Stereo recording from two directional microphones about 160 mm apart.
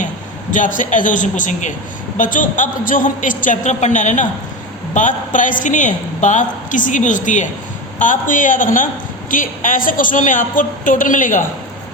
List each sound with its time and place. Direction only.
0.5 s a woman's voice: 55° left (ahead or behind)